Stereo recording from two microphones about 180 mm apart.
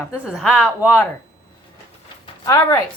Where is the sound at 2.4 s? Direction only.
20° left (ahead or behind).